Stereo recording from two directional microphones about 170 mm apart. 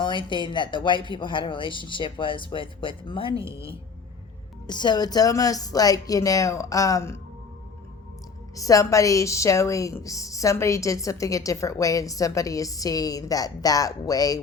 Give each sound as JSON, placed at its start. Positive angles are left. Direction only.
{"t": 0.0, "sound": "a woman's voice", "side_deg": 25}
{"t": 8.5, "sound": "a woman's voice", "side_deg": 20}